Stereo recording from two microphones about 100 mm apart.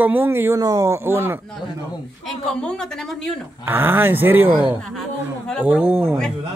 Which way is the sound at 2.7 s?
5° left (ahead or behind).